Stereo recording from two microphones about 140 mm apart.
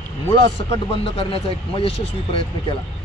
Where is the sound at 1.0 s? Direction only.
40° left (ahead or behind).